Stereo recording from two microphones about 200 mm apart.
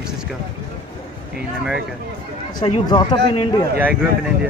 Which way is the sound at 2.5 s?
25° left (ahead or behind).